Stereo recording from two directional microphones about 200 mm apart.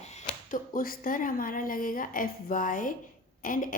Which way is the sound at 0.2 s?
40° left (ahead or behind).